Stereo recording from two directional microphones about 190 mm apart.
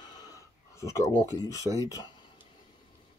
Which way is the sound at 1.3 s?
20° left (ahead or behind).